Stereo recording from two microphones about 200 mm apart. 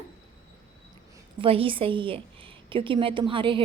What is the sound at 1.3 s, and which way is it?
A woman's voice, 25° right (ahead or behind).